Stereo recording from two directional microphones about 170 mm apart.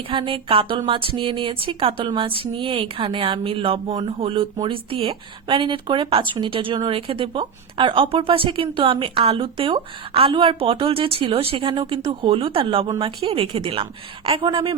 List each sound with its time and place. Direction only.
0.1 s speech: 30° right (ahead or behind)